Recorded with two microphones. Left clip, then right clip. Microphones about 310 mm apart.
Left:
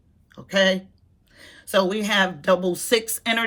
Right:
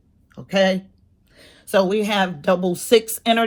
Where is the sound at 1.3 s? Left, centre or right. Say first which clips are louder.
Left 2 dB; centre.